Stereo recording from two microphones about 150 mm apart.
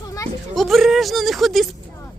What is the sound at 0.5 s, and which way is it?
Speech, centre (ahead or behind).